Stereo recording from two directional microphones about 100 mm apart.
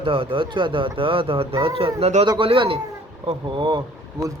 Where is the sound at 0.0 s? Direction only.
65° right (ahead or behind); by 2.2 s 85° right.